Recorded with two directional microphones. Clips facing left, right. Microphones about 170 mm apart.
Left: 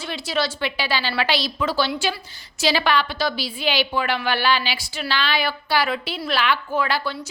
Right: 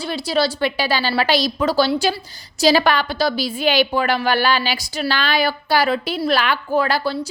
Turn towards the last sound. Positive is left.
turn(degrees=-40)  # may be behind; listen again after turning